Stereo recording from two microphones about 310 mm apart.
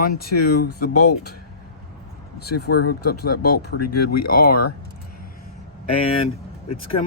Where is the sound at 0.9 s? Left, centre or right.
Left.